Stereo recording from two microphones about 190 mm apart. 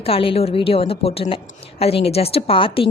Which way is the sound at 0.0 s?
30° left (ahead or behind).